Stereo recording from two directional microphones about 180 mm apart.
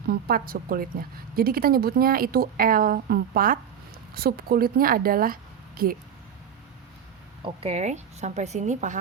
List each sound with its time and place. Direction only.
0.1 s a woman's voice: 55° right (ahead or behind)
7.4 s speech: 35° right (ahead or behind)